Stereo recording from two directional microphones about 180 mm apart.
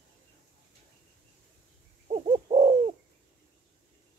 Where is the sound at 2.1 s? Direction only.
35° right (ahead or behind).